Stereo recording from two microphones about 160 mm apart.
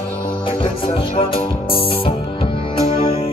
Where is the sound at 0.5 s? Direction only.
35° left (ahead or behind).